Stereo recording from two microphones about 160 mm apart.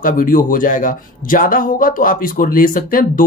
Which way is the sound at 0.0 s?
60° left (ahead or behind).